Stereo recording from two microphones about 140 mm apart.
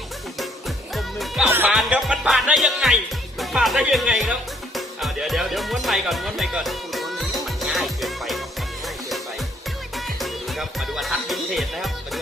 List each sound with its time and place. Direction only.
0.9 s music: centre (ahead or behind)
1.5 s music: 15° right (ahead or behind)
1.7 s music: 5° right (ahead or behind)
10.2 s speech: centre (ahead or behind)